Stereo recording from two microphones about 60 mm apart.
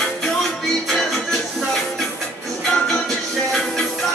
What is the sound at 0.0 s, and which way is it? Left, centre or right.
Music, centre.